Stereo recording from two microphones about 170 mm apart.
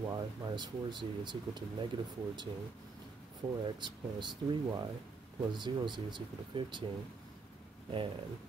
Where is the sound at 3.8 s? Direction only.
25° right (ahead or behind).